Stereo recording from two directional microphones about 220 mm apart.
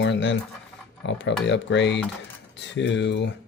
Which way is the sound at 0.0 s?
55° left (ahead or behind).